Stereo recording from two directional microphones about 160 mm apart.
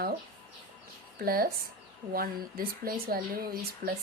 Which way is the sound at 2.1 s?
65° right (ahead or behind).